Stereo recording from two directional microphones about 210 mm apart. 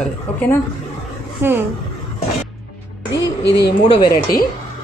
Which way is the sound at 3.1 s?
55° left (ahead or behind).